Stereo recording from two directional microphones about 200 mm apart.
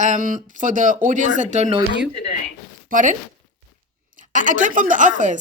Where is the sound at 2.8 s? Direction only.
40° right (ahead or behind).